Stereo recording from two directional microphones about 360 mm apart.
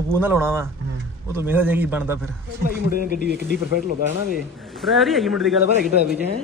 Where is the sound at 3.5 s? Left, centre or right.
Right.